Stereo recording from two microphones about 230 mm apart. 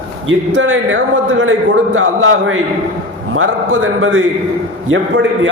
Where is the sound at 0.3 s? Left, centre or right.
Right.